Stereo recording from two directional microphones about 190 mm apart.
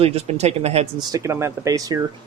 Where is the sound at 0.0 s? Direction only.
35° right (ahead or behind).